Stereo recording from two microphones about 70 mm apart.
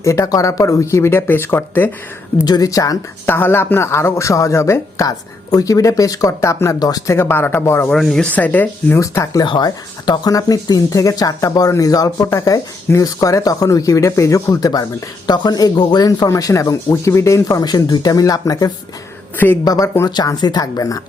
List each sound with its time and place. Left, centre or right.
0.0 s speech: left
0.3 s speech: left
2.4 s speech: left
3.2 s speech: left
5.0 s speech: left
6.7 s speech: left
7.1 s speech: left
7.6 s speech: left
8.3 s speech: left
9.0 s speech: left
9.4 s speech: left
15.3 s speech: left
16.9 s speech: left
17.6 s speech: left